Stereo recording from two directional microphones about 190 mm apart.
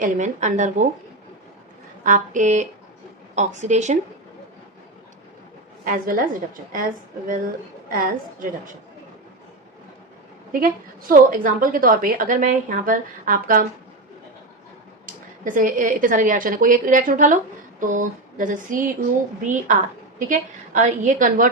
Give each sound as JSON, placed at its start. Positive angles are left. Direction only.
{"t": 0.0, "sound": "speech", "side_deg": -40}
{"t": 2.0, "sound": "speech", "side_deg": -40}
{"t": 5.8, "sound": "a woman's voice", "side_deg": -45}
{"t": 11.1, "sound": "a woman's voice", "side_deg": -45}
{"t": 15.0, "sound": "a woman's voice", "side_deg": -45}